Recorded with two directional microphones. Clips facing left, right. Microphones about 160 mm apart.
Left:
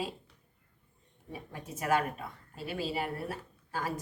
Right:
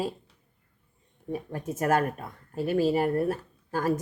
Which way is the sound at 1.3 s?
50° right (ahead or behind).